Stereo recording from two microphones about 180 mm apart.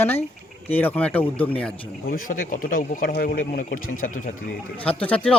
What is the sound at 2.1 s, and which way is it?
Speech, 50° left (ahead or behind).